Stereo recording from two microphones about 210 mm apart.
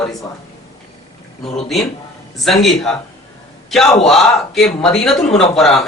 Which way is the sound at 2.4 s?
Centre (ahead or behind).